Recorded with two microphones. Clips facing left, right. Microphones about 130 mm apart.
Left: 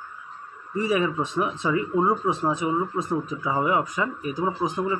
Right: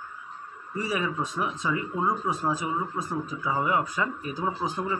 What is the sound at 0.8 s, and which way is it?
Speech, 20° left (ahead or behind).